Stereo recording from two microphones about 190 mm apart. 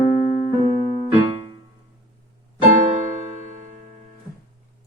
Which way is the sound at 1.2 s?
30° right (ahead or behind).